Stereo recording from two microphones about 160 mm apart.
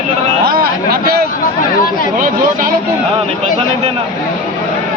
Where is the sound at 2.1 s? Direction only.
55° right (ahead or behind).